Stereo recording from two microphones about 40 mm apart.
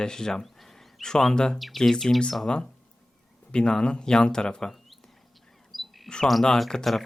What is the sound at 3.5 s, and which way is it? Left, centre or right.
Speech, left.